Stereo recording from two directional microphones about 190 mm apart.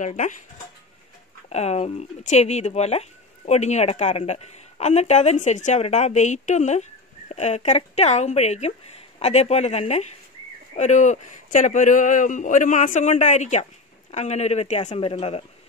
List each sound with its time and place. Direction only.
0.0 s speech: 40° left (ahead or behind)
1.5 s speech: 35° left (ahead or behind)